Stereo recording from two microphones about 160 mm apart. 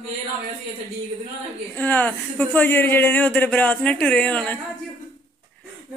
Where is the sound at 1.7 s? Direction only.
10° left (ahead or behind).